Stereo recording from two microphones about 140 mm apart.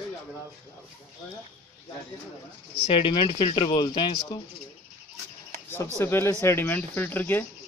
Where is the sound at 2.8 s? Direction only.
40° left (ahead or behind).